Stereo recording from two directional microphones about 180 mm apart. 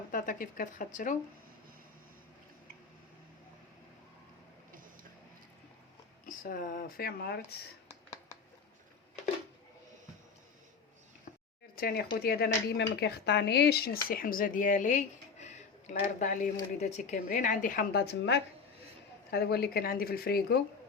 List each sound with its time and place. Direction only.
0.1 s speech: 50° left (ahead or behind)
6.2 s speech: 50° left (ahead or behind)
11.8 s speech: 60° left (ahead or behind)